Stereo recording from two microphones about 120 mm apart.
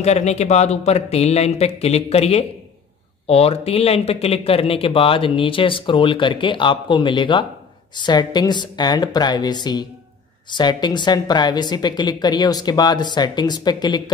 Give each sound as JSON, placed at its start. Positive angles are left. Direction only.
{"t": 0.0, "sound": "a woman's voice", "side_deg": 65}